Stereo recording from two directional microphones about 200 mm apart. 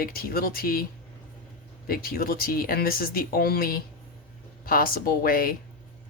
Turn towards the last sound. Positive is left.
turn(degrees=45)  # may be behind; listen again after turning